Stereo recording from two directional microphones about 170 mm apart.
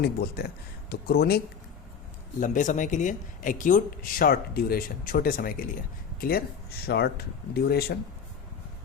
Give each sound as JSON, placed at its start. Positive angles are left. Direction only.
{"t": 0.0, "sound": "speech", "side_deg": 65}
{"t": 2.4, "sound": "speech", "side_deg": 50}